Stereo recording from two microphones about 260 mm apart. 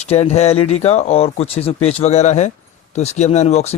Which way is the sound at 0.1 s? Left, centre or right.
Left.